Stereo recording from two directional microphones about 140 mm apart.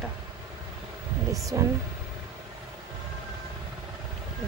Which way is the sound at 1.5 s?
25° right (ahead or behind).